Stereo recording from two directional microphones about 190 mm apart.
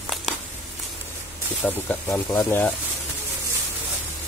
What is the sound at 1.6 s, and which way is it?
Speech, 10° left (ahead or behind).